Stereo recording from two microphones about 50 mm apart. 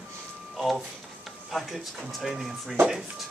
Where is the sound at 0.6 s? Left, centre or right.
Centre.